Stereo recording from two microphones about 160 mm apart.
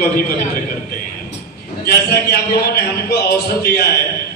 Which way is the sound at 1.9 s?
75° left (ahead or behind).